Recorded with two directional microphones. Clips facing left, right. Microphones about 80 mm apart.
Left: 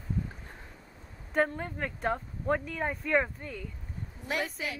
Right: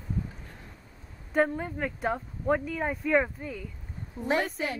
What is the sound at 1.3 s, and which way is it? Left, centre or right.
Speech, centre.